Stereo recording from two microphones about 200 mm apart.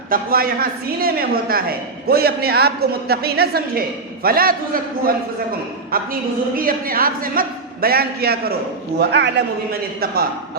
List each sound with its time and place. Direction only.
0.1 s a woman's voice: 45° right (ahead or behind)